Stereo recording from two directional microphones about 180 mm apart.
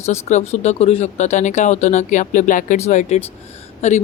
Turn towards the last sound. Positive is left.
turn(degrees=40)  # may be behind; listen again after turning